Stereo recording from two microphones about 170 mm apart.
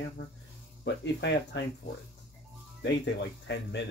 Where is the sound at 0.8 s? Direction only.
90° left.